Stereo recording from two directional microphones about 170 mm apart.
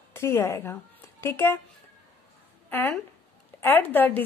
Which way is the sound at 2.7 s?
10° left (ahead or behind).